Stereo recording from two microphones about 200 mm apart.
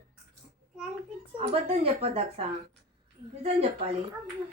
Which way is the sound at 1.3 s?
30° right (ahead or behind).